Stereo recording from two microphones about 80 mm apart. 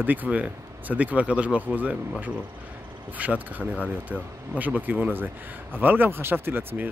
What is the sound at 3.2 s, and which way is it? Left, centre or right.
Speech, centre.